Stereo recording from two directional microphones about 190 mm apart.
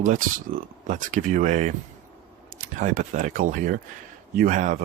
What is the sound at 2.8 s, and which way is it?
Speech, 40° right (ahead or behind).